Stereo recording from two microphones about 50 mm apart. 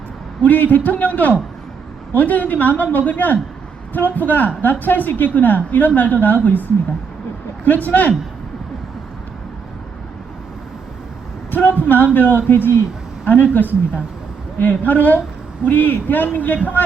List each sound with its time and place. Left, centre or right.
0.4 s a woman's voice: left
11.5 s a woman's voice: left